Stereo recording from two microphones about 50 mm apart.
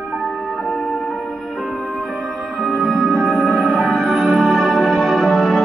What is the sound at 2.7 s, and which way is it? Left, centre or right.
Music, centre.